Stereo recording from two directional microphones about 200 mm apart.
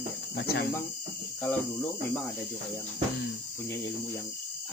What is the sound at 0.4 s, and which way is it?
Speech, 55° left (ahead or behind).